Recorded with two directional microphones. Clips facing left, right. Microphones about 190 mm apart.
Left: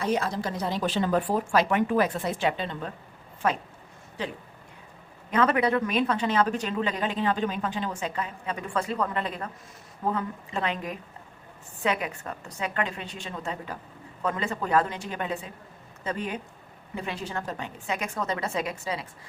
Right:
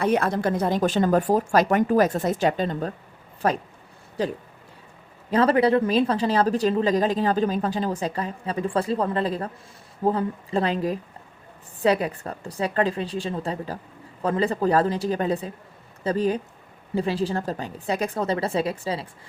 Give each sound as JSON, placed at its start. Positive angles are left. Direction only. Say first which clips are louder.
{"t": 0.0, "sound": "speech", "louder": "right 5 dB", "side_deg": -60}